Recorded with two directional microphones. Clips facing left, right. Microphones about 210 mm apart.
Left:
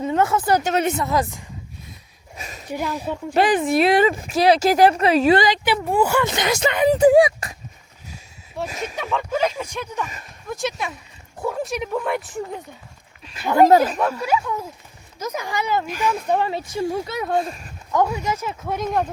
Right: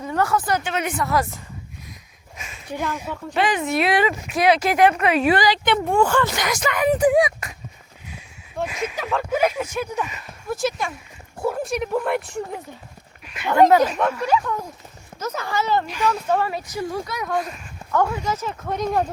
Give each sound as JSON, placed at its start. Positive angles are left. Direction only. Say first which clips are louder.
{"t": 0.0, "sound": "speech", "louder": "left 2 dB", "side_deg": 25}
{"t": 0.6, "sound": "speech", "louder": "left 5 dB", "side_deg": 40}
{"t": 0.9, "sound": "speech", "louder": "left 2 dB", "side_deg": 20}
{"t": 2.6, "sound": "speech", "louder": "left 1 dB", "side_deg": 10}
{"t": 2.9, "sound": "speech", "louder": "left 4 dB", "side_deg": 35}
{"t": 5.6, "sound": "speech", "louder": "right 1 dB", "side_deg": 5}
{"t": 6.2, "sound": "speech", "louder": "left 3 dB", "side_deg": 25}
{"t": 8.6, "sound": "speech", "louder": "right 2 dB", "side_deg": 40}
{"t": 9.0, "sound": "speech", "louder": "right 1 dB", "side_deg": -5}
{"t": 13.2, "sound": "speech", "louder": "left 1 dB", "side_deg": 30}
{"t": 14.0, "sound": "speech", "louder": "right 1 dB", "side_deg": 5}
{"t": 17.9, "sound": "speech", "louder": "left 1 dB", "side_deg": 15}